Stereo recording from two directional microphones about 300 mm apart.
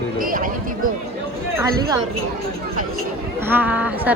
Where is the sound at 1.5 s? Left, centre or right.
Centre.